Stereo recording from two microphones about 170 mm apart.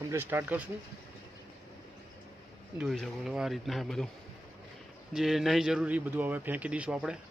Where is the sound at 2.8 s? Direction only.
Centre (ahead or behind).